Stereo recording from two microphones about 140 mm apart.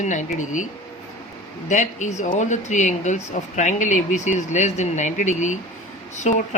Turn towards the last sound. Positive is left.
turn(degrees=60)  # may be behind; listen again after turning